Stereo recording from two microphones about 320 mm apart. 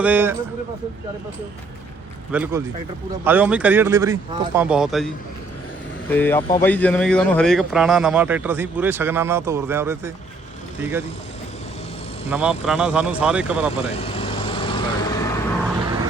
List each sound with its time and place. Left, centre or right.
0.0 s speech: centre
2.3 s speech: centre
12.3 s speech: centre
13.9 s vehicle: centre